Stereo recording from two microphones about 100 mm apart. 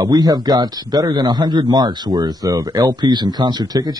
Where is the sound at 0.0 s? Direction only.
40° right (ahead or behind).